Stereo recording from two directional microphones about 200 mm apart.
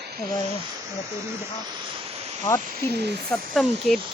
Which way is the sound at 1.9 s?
30° right (ahead or behind).